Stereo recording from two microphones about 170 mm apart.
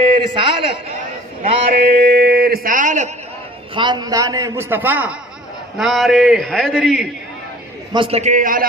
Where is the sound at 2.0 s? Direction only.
70° right (ahead or behind); by 3.1 s 50° right (ahead or behind).